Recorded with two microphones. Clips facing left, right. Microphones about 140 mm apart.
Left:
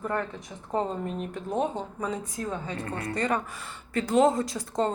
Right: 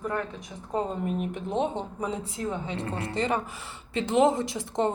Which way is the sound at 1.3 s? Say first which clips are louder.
Right 1 dB; 20° right (ahead or behind).